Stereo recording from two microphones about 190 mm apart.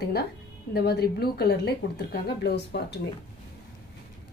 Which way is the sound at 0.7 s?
55° left (ahead or behind).